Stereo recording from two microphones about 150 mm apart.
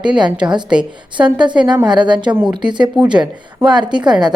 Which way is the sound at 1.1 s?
30° right (ahead or behind).